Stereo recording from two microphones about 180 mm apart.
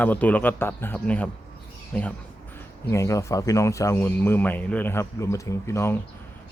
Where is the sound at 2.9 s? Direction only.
15° left (ahead or behind).